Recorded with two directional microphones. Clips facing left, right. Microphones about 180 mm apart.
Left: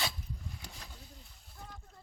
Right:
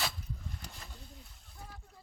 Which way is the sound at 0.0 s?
Centre (ahead or behind).